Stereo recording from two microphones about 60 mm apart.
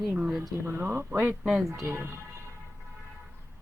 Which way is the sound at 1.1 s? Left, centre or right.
Right.